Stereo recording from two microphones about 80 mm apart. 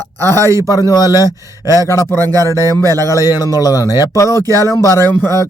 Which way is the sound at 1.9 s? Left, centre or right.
Left.